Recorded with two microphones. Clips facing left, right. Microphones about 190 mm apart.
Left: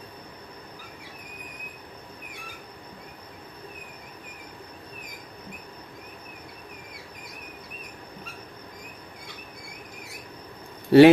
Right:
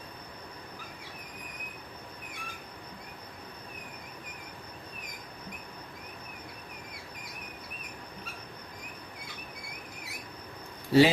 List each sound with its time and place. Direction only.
10.9 s speech: 65° left (ahead or behind)